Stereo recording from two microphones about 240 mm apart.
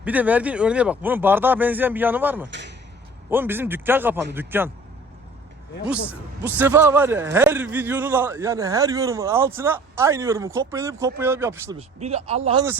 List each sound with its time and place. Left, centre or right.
0.0 s a man's voice: centre
2.5 s speech: right
3.2 s a man's voice: centre
6.4 s a man's voice: centre
11.8 s speech: right